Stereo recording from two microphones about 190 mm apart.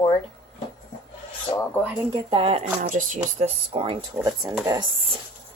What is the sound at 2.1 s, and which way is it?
Speech, 25° right (ahead or behind).